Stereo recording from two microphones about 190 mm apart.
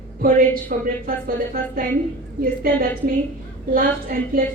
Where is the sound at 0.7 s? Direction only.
50° right (ahead or behind).